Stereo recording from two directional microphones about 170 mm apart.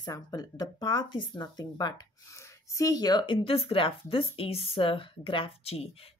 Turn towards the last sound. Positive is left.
turn(degrees=35)  # may be behind; listen again after turning